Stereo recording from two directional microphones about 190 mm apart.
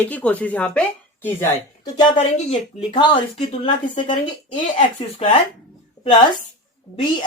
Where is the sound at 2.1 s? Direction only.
35° left (ahead or behind).